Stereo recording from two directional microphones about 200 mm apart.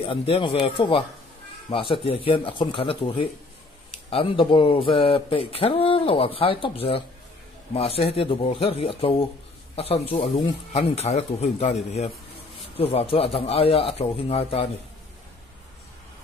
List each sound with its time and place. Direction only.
0.0 s speech: 25° left (ahead or behind)